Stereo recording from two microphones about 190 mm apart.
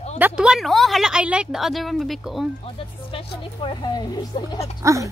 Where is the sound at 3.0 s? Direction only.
25° left (ahead or behind).